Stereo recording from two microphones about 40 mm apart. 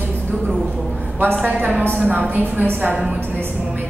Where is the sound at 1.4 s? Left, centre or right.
Right.